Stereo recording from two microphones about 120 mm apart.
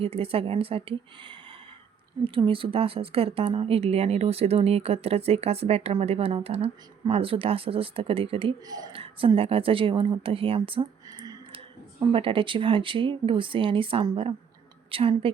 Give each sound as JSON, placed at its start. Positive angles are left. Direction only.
{"t": 0.0, "sound": "a woman's voice", "side_deg": -50}
{"t": 2.2, "sound": "a woman's voice", "side_deg": -45}